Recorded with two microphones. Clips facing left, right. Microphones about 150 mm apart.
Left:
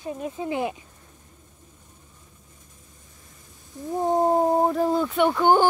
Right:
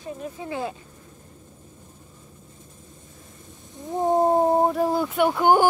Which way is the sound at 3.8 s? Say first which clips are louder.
Left 3 dB; 20° right (ahead or behind).